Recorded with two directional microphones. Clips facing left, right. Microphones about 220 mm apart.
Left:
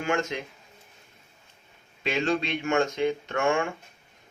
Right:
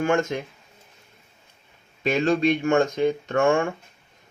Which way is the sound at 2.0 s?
45° right (ahead or behind).